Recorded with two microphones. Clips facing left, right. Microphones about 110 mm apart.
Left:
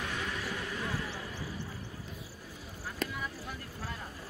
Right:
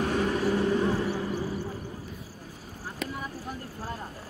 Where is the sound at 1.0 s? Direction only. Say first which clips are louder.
Right 11 dB; 45° right (ahead or behind).